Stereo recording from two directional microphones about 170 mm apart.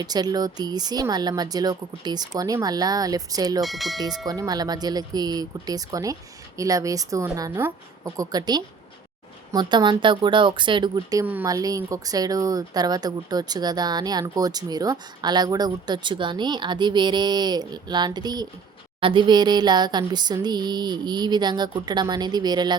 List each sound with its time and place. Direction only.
0.0 s speech: 25° right (ahead or behind)
3.6 s speech: centre (ahead or behind)
4.3 s speech: 20° right (ahead or behind)